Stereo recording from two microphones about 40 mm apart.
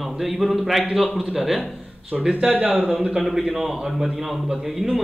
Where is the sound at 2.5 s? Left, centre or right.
Right.